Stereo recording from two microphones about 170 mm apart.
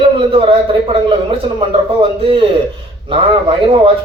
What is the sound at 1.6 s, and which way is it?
A man's voice, 30° right (ahead or behind).